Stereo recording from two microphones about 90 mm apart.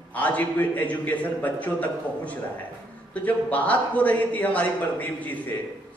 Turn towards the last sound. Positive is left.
turn(degrees=15)  # may be behind; listen again after turning